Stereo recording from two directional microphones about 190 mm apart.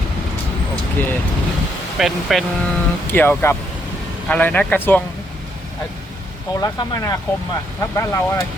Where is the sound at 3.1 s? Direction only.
10° left (ahead or behind).